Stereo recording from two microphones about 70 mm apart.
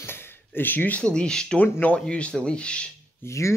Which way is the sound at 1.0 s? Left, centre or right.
Centre.